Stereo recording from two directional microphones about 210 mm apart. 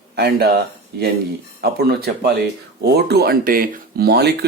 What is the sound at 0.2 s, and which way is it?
Speech, 45° right (ahead or behind).